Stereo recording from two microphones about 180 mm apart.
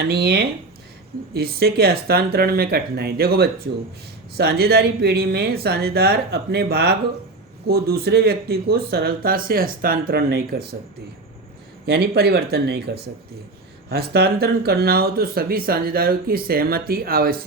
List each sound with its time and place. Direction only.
0.0 s speech: 65° right (ahead or behind)
11.9 s speech: 65° right (ahead or behind)